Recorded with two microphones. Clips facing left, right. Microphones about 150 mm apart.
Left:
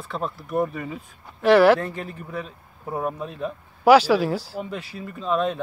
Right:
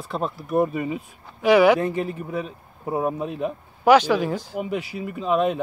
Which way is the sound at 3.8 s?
5° left (ahead or behind).